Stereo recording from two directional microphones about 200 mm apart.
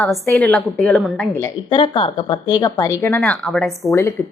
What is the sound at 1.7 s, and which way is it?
A woman's voice, 25° left (ahead or behind).